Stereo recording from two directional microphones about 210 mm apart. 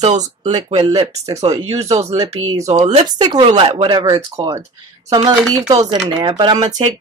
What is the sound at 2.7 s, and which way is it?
Speech, 30° right (ahead or behind).